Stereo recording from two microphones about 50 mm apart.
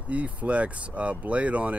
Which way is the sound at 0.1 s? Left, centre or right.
Right.